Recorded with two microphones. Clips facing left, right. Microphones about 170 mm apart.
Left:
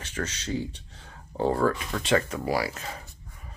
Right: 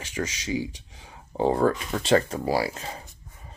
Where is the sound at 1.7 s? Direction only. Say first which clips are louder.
Right 3 dB; 30° right (ahead or behind).